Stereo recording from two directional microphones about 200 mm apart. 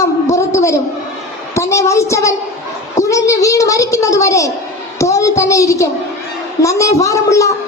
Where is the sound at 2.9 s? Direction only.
15° left (ahead or behind).